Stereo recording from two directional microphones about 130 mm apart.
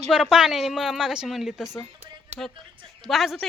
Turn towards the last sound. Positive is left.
turn(degrees=0)  # may be behind; listen again after turning